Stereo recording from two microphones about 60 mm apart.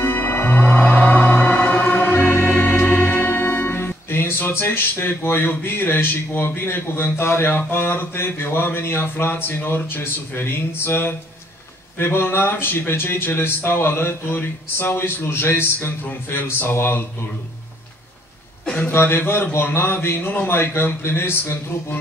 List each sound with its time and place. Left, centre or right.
0.0 s music: left
12.0 s speech: left
18.9 s speech: left